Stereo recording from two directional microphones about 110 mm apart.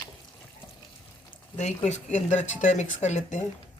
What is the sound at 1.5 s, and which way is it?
Speech, 90° left.